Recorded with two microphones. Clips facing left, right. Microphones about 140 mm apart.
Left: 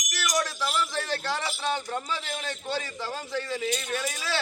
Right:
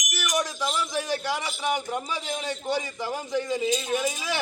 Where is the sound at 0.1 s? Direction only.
15° right (ahead or behind).